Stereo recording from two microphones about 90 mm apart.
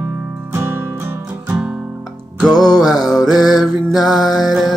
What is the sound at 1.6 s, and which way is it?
Guitar, 15° right (ahead or behind).